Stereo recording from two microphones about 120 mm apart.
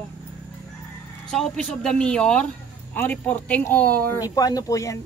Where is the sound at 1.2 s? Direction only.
5° left (ahead or behind).